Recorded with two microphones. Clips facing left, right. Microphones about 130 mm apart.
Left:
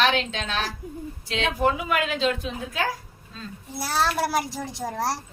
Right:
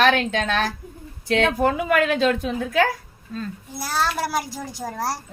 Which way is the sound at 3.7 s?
Centre (ahead or behind).